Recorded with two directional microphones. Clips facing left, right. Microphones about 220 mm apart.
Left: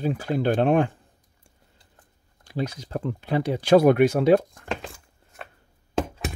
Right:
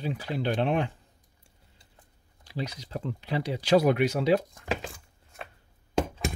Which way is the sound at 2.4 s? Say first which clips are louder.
Left 6 dB; 50° left (ahead or behind).